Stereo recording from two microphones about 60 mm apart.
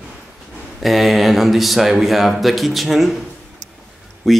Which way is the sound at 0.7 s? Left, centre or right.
Centre.